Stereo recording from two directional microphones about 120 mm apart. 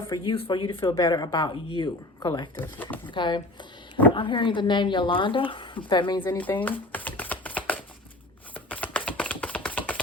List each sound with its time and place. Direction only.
0.1 s a woman's voice: 45° left (ahead or behind)
2.6 s speech: 15° left (ahead or behind)
3.1 s a woman's voice: 40° left (ahead or behind)
6.2 s typewriter: 15° left (ahead or behind)
8.5 s typing: 10° left (ahead or behind)
9.0 s a sound: 10° left (ahead or behind)